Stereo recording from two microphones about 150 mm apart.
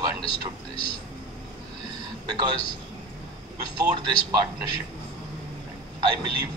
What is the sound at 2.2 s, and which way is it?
Speech, 30° right (ahead or behind).